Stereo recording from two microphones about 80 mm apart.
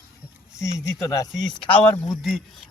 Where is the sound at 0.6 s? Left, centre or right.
Left.